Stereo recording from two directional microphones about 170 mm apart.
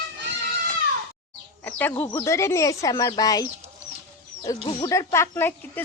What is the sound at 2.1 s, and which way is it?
A woman's voice, 15° left (ahead or behind).